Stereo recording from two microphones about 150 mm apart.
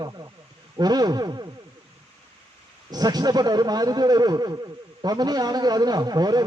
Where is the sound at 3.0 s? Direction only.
25° right (ahead or behind).